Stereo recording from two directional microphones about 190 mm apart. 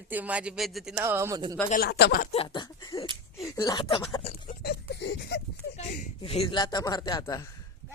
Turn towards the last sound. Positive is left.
turn(degrees=20)  # may be behind; listen again after turning